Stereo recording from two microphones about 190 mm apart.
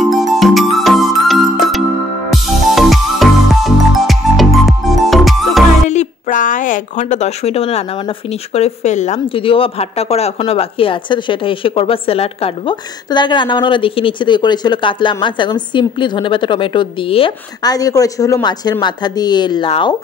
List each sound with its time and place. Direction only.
0.0 s music: centre (ahead or behind)
5.9 s a sound: 40° left (ahead or behind)
8.3 s speech: 35° left (ahead or behind)